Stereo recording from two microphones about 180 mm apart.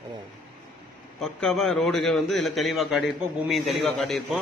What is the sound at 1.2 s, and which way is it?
A man's voice, centre (ahead or behind).